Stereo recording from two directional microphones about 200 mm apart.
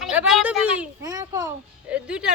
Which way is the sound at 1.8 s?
5° right (ahead or behind).